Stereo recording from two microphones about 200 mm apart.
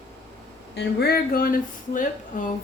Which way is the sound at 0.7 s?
55° left (ahead or behind).